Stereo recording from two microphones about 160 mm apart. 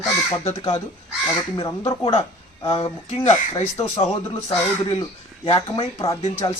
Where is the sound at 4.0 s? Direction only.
45° left (ahead or behind).